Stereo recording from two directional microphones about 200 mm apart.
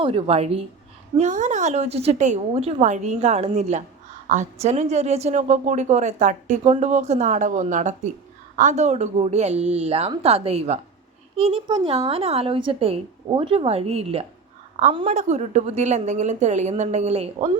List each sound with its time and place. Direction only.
0.0 s a woman's voice: 30° right (ahead or behind)